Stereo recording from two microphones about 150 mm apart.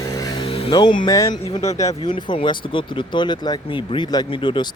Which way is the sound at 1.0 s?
25° left (ahead or behind).